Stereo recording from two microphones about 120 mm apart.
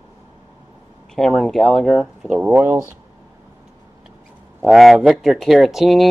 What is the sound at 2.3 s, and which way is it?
Speech, 10° right (ahead or behind).